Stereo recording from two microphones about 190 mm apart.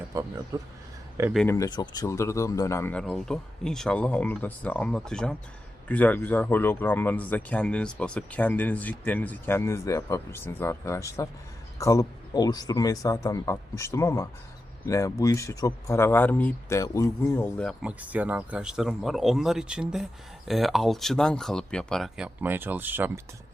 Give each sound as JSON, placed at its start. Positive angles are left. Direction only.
{"t": 0.1, "sound": "speech", "side_deg": -15}
{"t": 1.5, "sound": "a man's voice", "side_deg": 20}
{"t": 18.0, "sound": "speech", "side_deg": -10}